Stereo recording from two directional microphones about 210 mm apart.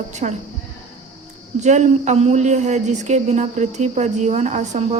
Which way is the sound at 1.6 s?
35° right (ahead or behind).